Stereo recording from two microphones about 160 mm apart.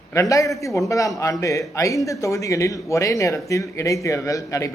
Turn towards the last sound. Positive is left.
turn(degrees=20)  # may be behind; listen again after turning